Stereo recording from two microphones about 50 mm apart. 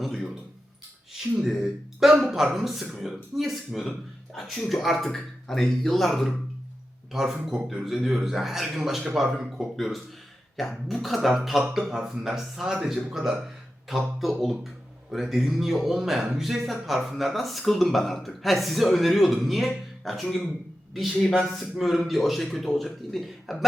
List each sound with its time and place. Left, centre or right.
0.0 s a sound: centre
1.1 s speech: centre
21.2 s speech: centre
21.5 s speech: centre